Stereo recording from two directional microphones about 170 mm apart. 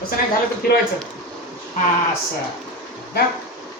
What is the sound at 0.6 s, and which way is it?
Speech, 65° left (ahead or behind).